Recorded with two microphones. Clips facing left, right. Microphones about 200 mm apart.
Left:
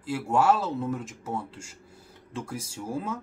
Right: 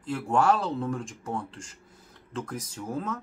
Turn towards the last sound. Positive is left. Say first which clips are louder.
# even
turn(degrees=10)  # may be behind; listen again after turning